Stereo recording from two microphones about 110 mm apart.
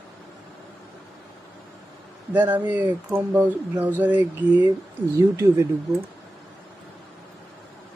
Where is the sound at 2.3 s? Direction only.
15° right (ahead or behind).